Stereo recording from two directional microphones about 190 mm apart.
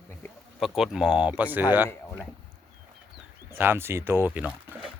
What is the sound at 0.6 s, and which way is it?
Speech, centre (ahead or behind).